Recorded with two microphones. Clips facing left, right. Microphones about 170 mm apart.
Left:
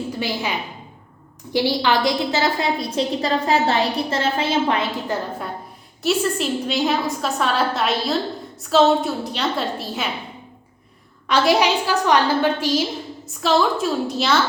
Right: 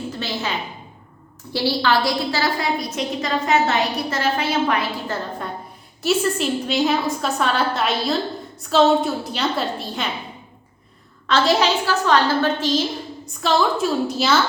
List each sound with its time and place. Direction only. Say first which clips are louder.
0.1 s a woman's voice: left 2 dB; 10° left (ahead or behind)
1.5 s a woman's voice: left 1 dB; 15° left (ahead or behind)
6.0 s a woman's voice: even; centre (ahead or behind)
11.3 s a woman's voice: left 1 dB; 15° left (ahead or behind)